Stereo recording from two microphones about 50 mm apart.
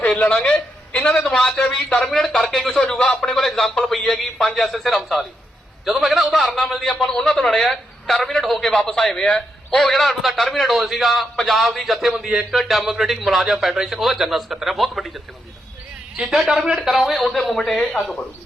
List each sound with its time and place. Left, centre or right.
0.1 s a sound: centre
0.9 s a man's voice: centre
16.2 s a man's voice: right
16.6 s a man's voice: centre